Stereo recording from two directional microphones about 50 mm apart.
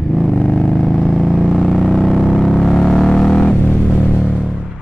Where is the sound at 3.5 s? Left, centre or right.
Left.